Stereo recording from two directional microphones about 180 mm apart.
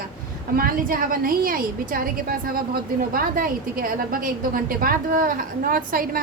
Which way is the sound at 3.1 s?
50° right (ahead or behind).